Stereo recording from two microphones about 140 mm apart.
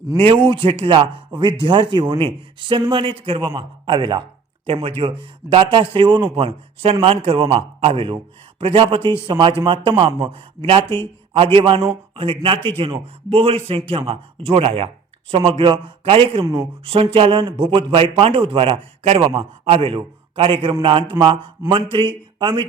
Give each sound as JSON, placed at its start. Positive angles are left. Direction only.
{"t": 0.4, "sound": "speech", "side_deg": -40}
{"t": 16.4, "sound": "speech", "side_deg": -20}
{"t": 16.8, "sound": "a man's voice", "side_deg": -40}